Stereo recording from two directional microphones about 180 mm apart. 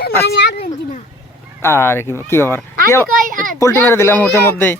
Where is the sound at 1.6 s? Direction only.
15° left (ahead or behind).